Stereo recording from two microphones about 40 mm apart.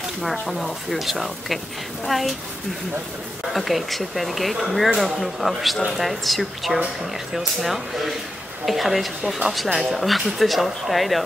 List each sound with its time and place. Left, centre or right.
0.2 s speech: centre
3.5 s speech: centre